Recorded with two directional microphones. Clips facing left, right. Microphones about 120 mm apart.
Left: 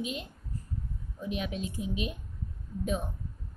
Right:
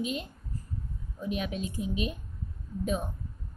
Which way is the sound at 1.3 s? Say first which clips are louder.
Right 2 dB; 45° right (ahead or behind).